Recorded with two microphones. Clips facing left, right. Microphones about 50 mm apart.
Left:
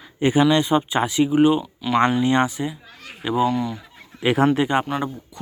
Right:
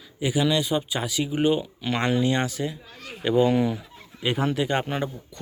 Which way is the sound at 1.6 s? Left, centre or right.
Centre.